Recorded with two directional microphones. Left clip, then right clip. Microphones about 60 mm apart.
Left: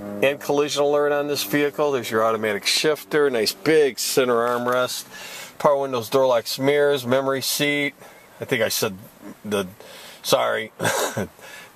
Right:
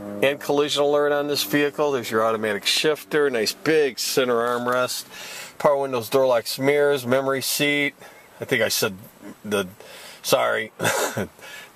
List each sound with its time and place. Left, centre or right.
0.2 s speech: centre
2.6 s speech: left
4.6 s speech: centre; by 8.9 s right
10.2 s speech: centre
11.1 s a sound: centre